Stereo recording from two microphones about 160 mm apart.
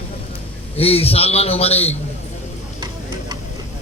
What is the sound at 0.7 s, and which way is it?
A man's voice, 40° left (ahead or behind).